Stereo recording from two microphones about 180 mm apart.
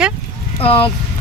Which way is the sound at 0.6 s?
30° left (ahead or behind).